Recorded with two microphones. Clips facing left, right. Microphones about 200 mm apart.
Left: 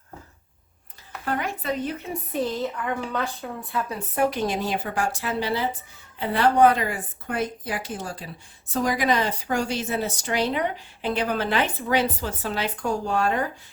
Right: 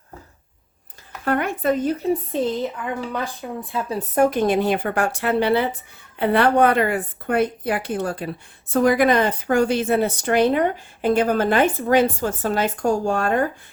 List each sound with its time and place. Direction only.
1.2 s a woman's voice: 60° right (ahead or behind); by 2.0 s 40° right (ahead or behind)
2.3 s speech: 20° right (ahead or behind)
3.7 s speech: 25° right (ahead or behind)
4.1 s a woman's voice: 50° right (ahead or behind)